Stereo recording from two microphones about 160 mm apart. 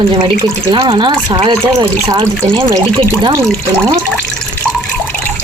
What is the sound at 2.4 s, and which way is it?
Speech, 15° right (ahead or behind).